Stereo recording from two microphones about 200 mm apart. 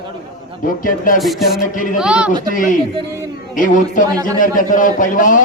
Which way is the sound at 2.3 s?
40° left (ahead or behind).